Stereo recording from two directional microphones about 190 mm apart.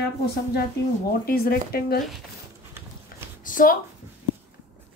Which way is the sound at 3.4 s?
45° left (ahead or behind).